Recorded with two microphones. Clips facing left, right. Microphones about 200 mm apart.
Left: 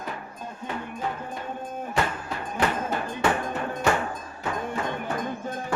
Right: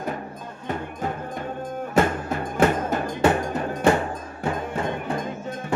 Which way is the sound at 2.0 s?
45° right (ahead or behind).